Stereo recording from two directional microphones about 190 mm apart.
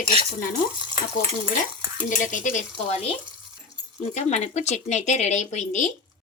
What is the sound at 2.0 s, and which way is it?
Speech, 45° left (ahead or behind).